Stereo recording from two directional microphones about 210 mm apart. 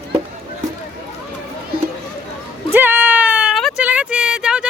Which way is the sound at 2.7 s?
10° right (ahead or behind).